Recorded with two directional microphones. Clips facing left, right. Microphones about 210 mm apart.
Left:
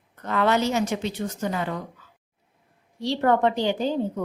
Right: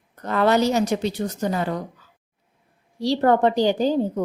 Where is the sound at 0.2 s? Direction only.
35° right (ahead or behind).